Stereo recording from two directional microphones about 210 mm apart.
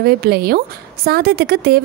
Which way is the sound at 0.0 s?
45° right (ahead or behind).